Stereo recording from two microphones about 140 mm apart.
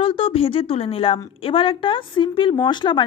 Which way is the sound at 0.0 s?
40° left (ahead or behind).